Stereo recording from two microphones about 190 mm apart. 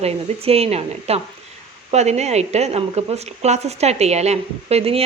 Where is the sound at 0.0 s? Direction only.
30° right (ahead or behind).